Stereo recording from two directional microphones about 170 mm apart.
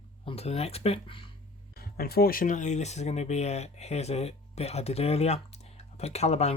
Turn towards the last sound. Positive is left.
turn(degrees=40)  # may be behind; listen again after turning